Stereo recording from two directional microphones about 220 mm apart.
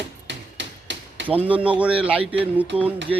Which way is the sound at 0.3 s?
55° right (ahead or behind).